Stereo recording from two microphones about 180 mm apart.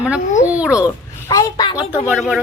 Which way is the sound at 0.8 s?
15° left (ahead or behind).